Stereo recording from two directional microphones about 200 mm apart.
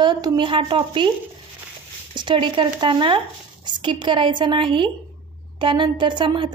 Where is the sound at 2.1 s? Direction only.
25° right (ahead or behind).